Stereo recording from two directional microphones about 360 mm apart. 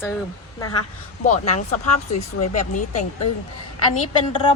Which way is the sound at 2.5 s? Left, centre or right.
Centre.